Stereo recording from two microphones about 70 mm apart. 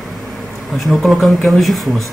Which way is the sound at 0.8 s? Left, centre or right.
Centre.